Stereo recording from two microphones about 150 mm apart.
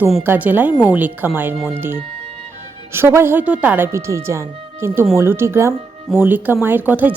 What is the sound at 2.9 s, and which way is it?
Speech, 15° right (ahead or behind).